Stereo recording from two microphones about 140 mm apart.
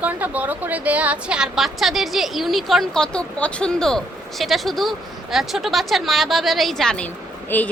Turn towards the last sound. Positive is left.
turn(degrees=10)  # may be behind; listen again after turning